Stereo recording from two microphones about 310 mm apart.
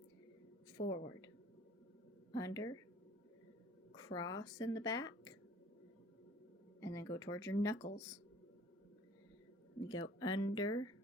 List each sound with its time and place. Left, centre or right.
0.8 s speech: left
2.3 s speech: centre
3.9 s speech: centre
6.7 s speech: centre
7.8 s speech: left
9.9 s speech: centre